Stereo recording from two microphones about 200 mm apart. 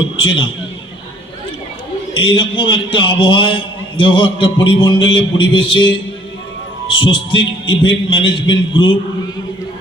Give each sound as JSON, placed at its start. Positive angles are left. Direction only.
{"t": 0.2, "sound": "a man's voice", "side_deg": 25}
{"t": 2.1, "sound": "a man's voice", "side_deg": 25}